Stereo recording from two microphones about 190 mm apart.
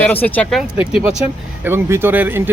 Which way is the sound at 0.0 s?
10° left (ahead or behind).